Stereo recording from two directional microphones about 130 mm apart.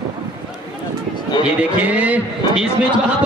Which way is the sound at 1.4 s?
10° right (ahead or behind).